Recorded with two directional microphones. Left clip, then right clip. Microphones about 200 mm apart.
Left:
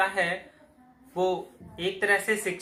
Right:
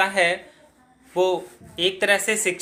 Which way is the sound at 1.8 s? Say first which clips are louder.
Right 5 dB; 45° right (ahead or behind).